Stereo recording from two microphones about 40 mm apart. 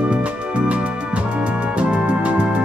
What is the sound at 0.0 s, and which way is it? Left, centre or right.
Music, right.